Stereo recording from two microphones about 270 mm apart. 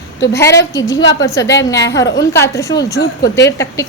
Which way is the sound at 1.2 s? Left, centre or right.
Centre.